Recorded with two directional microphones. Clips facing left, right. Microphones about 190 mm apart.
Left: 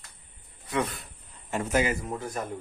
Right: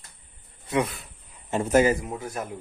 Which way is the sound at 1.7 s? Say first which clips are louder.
Right 7 dB; 45° right (ahead or behind).